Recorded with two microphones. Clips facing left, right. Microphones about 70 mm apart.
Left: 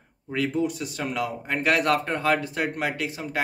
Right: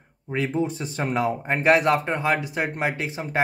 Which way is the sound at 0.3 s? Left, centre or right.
Right.